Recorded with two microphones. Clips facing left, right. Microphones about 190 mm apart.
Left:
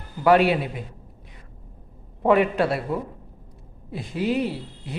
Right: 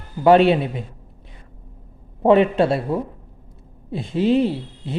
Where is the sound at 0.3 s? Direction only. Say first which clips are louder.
Right 4 dB; 25° right (ahead or behind).